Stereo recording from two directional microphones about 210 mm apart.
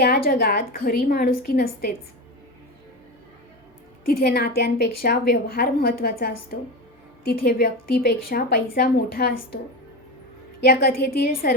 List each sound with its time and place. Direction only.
0.0 s a woman's voice: 45° left (ahead or behind)
4.0 s a woman's voice: 50° left (ahead or behind)
10.6 s a woman's voice: 50° left (ahead or behind)